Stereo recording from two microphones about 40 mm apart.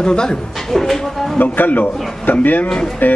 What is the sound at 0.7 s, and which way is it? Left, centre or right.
Speech, centre.